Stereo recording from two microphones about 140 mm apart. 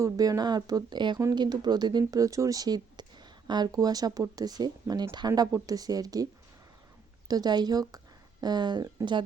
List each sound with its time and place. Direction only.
0.0 s speech: 25° right (ahead or behind)
7.3 s speech: 30° right (ahead or behind)